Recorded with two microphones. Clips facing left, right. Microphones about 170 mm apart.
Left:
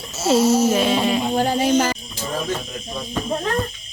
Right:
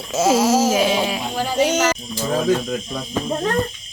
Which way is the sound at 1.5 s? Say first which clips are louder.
Right 4 dB; 80° right.